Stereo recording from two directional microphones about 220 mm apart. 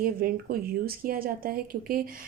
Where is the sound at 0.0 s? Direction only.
40° right (ahead or behind).